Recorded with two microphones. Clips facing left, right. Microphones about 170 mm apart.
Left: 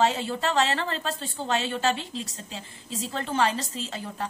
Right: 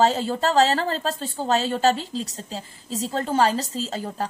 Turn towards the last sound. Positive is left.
turn(degrees=-35)  # may be behind; listen again after turning